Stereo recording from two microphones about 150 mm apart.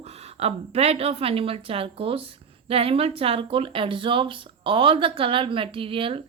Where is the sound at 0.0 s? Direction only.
45° right (ahead or behind).